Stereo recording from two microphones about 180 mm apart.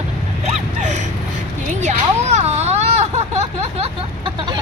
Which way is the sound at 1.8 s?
40° right (ahead or behind).